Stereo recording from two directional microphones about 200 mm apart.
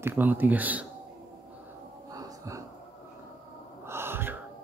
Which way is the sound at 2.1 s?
15° right (ahead or behind).